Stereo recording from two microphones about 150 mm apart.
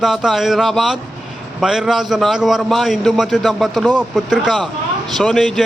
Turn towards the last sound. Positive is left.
turn(degrees=0)  # may be behind; listen again after turning